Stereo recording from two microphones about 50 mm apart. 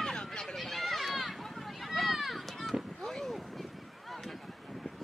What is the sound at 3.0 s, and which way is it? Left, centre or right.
Boat, centre.